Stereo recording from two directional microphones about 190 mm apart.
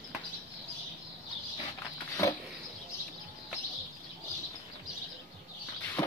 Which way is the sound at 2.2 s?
15° left (ahead or behind).